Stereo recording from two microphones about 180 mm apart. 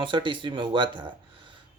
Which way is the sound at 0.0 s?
25° right (ahead or behind).